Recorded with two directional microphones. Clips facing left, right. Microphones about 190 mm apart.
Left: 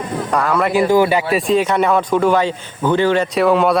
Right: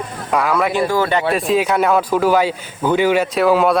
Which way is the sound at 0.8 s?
15° left (ahead or behind).